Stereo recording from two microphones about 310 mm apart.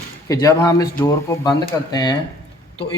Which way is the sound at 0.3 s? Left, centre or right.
Centre.